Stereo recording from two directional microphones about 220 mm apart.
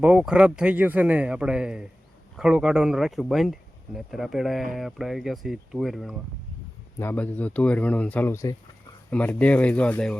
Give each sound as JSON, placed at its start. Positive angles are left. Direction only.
{"t": 0.0, "sound": "a man's voice", "side_deg": -5}